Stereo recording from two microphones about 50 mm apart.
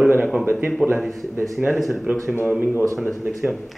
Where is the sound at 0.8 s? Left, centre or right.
Centre.